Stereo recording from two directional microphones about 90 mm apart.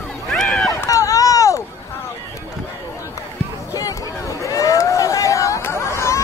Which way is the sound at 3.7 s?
40° left (ahead or behind).